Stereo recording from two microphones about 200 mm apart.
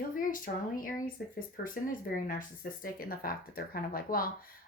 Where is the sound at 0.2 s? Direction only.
45° left (ahead or behind).